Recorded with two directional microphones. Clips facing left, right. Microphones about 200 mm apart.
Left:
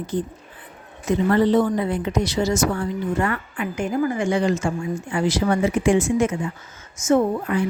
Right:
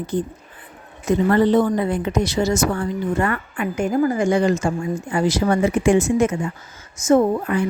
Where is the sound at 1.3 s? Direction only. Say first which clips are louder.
Right 1 dB; 50° right (ahead or behind).